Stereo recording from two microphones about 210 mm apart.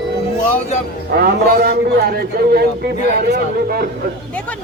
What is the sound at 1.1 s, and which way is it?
A man's voice, 45° right (ahead or behind).